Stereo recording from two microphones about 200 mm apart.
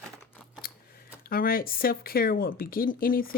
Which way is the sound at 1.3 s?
45° left (ahead or behind).